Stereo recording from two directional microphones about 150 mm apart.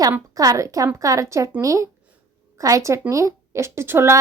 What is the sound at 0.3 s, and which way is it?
Speech, 20° right (ahead or behind).